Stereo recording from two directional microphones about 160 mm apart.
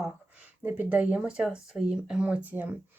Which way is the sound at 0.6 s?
10° right (ahead or behind).